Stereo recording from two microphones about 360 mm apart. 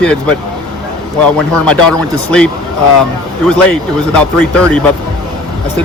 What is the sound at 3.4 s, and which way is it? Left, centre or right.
Speech, centre.